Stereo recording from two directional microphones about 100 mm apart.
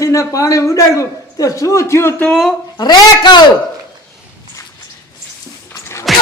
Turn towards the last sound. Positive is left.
turn(degrees=30)  # may be behind; listen again after turning